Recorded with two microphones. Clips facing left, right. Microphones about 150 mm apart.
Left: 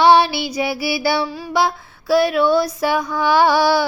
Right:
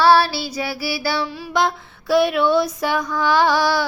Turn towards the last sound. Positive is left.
turn(degrees=10)  # may be behind; listen again after turning